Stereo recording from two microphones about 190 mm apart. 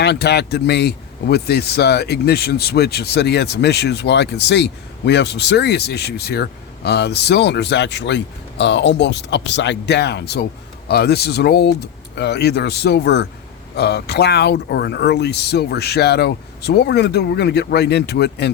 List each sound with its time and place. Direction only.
0.0 s speech: 60° left (ahead or behind)